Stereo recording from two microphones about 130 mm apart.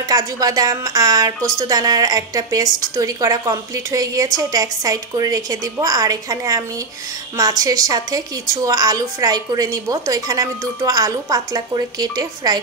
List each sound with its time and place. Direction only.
0.0 s a woman's voice: 30° right (ahead or behind)